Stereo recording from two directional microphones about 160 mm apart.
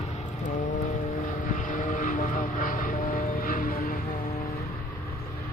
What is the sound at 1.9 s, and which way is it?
Vehicle, 55° left (ahead or behind).